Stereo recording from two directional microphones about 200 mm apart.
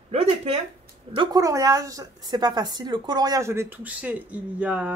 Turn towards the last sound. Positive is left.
turn(degrees=-10)  # may be behind; listen again after turning